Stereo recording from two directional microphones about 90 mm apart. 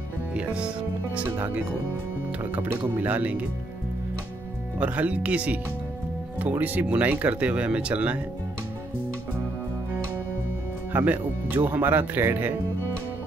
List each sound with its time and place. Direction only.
0.3 s speech: 10° right (ahead or behind)
4.7 s speech: 15° right (ahead or behind)
6.6 s speech: 20° right (ahead or behind)
10.9 s speech: 20° right (ahead or behind)